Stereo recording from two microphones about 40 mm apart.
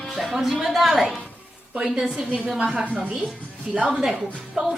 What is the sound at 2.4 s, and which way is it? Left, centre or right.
A woman's voice, right.